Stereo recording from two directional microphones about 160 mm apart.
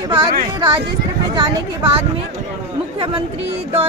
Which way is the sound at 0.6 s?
30° right (ahead or behind).